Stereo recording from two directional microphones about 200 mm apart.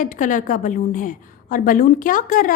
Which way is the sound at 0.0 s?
40° left (ahead or behind).